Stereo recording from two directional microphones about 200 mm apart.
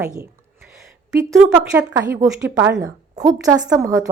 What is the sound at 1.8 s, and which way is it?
A woman's voice, 15° right (ahead or behind).